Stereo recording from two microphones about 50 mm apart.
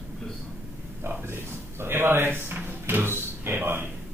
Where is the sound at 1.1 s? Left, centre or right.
Right.